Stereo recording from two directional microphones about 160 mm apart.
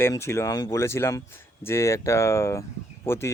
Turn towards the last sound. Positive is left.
turn(degrees=15)  # may be behind; listen again after turning